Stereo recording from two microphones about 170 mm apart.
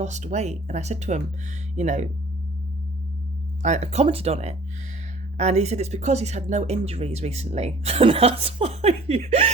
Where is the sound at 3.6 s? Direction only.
40° right (ahead or behind).